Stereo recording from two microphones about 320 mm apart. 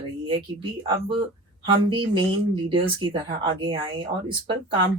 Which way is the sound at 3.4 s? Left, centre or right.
Centre.